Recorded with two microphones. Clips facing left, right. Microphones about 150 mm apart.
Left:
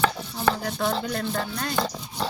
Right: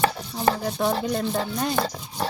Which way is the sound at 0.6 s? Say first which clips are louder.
Right 2 dB; 10° right (ahead or behind).